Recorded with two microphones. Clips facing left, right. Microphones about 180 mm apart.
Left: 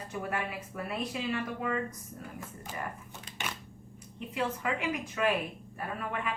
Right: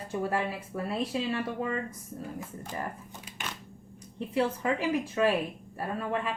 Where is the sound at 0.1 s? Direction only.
30° right (ahead or behind).